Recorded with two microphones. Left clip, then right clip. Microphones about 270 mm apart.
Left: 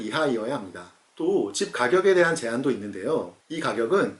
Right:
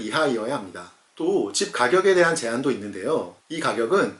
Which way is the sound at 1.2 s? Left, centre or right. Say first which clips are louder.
Right 1 dB; left.